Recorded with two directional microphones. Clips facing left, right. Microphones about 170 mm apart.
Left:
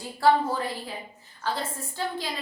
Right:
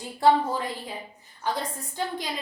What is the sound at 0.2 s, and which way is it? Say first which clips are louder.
Speech: right 1 dB; 20° right (ahead or behind).